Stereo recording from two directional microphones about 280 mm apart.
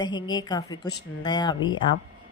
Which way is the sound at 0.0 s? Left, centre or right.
Centre.